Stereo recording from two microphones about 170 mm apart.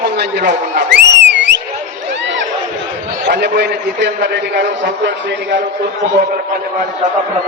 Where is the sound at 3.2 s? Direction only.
90° right.